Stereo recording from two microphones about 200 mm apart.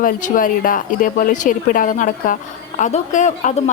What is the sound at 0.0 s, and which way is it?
A woman's voice, 45° left (ahead or behind).